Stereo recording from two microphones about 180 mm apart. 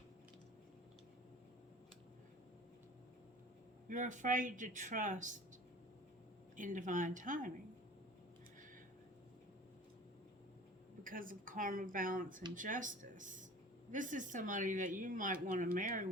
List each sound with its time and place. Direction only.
3.8 s speech: 45° right (ahead or behind)
6.6 s speech: 45° right (ahead or behind)
11.0 s speech: 50° right (ahead or behind)